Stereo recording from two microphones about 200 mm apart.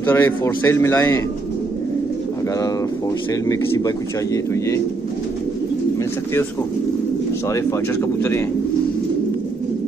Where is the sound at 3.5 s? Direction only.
15° left (ahead or behind).